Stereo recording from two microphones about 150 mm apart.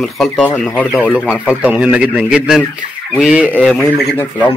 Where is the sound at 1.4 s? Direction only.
10° right (ahead or behind).